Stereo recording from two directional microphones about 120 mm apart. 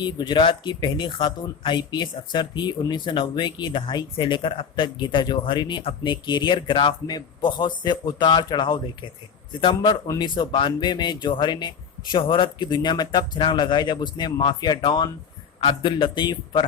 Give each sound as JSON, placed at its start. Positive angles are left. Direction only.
{"t": 0.0, "sound": "a man's voice", "side_deg": 40}